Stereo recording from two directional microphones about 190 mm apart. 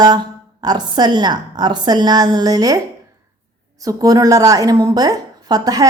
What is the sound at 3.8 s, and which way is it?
A woman's voice, 20° right (ahead or behind).